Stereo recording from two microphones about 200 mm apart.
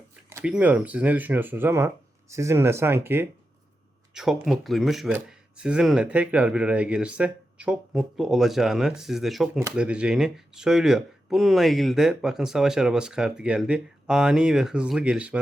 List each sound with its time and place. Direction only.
0.3 s speech: 10° right (ahead or behind)